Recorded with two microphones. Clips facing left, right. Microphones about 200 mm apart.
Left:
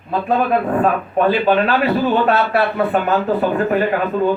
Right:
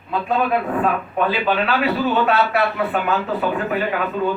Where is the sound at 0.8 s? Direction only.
45° left (ahead or behind).